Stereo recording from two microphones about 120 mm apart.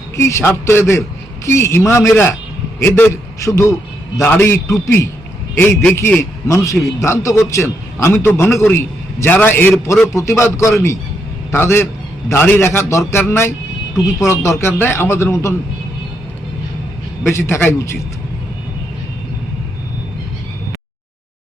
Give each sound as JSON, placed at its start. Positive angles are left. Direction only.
{"t": 0.2, "sound": "a man's voice", "side_deg": 25}
{"t": 17.2, "sound": "a man's voice", "side_deg": 20}